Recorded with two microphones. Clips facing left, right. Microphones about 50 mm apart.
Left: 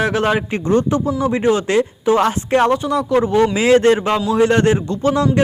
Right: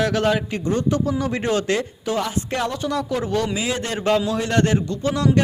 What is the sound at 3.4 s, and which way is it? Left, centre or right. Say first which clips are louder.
Speech: left 11 dB; left.